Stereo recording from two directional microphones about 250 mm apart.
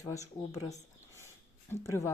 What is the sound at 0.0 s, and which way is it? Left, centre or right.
Speech, centre.